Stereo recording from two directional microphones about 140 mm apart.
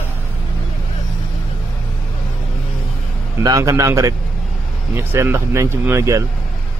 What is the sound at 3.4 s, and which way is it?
Speech, 25° right (ahead or behind).